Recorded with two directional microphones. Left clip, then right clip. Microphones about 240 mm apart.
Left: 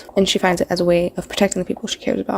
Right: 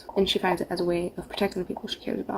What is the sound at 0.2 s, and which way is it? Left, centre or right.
Speech, left.